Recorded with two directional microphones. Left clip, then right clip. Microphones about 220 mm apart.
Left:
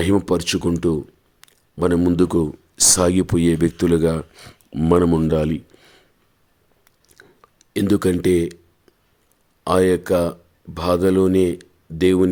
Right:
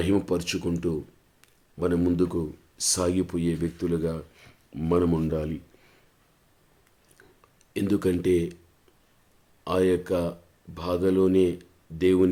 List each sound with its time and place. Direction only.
0.0 s speech: 35° left (ahead or behind)
7.1 s a sound: 30° left (ahead or behind)
9.6 s speech: 35° left (ahead or behind)